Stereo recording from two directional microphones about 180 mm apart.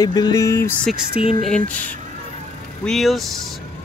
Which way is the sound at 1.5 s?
5° left (ahead or behind).